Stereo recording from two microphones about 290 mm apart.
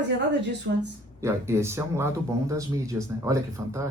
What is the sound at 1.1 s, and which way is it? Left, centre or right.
A man's voice, centre.